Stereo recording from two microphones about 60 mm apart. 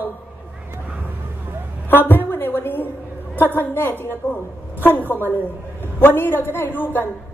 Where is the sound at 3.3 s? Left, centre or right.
Left.